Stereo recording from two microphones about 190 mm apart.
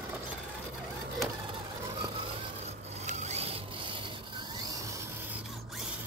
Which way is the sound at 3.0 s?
35° right (ahead or behind).